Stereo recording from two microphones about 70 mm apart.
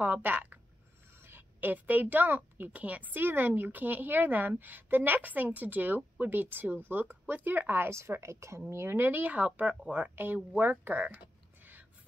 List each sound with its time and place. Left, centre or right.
0.0 s a woman's voice: right